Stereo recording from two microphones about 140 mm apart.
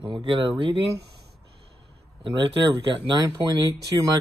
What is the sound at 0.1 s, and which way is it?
Speech, 35° right (ahead or behind).